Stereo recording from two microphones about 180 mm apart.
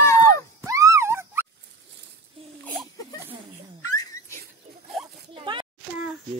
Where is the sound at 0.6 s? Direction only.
15° right (ahead or behind).